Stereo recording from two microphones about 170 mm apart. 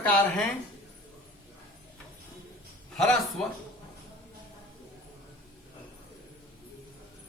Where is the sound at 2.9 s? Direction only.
5° left (ahead or behind).